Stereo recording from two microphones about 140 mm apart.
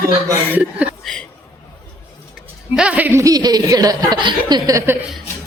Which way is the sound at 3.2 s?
25° right (ahead or behind).